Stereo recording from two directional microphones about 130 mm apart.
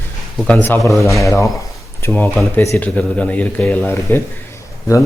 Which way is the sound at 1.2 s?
20° left (ahead or behind).